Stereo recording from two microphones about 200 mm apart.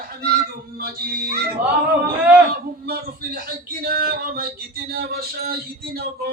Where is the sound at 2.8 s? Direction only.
50° right (ahead or behind).